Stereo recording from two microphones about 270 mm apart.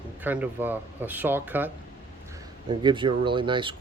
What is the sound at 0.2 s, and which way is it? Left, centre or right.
Speech, centre.